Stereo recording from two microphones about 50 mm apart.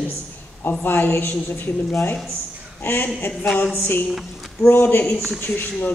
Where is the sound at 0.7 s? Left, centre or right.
Left.